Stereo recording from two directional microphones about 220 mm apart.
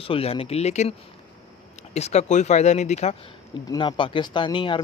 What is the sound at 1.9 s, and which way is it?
Speech, 30° left (ahead or behind).